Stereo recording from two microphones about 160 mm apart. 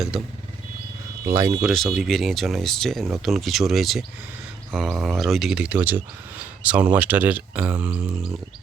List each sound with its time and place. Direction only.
1.2 s speech: 20° right (ahead or behind)
1.6 s speech: centre (ahead or behind)